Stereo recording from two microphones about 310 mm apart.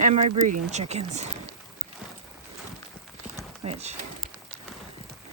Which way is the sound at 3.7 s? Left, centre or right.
Right.